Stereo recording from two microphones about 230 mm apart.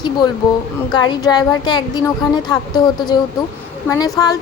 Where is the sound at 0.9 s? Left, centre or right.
Centre.